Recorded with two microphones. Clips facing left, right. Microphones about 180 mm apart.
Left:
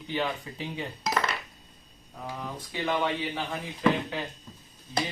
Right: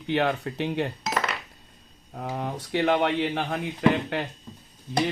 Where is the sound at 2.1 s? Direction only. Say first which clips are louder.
Right 6 dB; 60° right (ahead or behind).